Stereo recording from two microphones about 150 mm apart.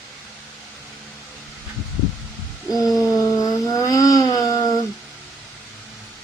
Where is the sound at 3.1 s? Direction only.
25° left (ahead or behind).